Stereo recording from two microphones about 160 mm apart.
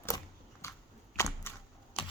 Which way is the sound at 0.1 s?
25° left (ahead or behind).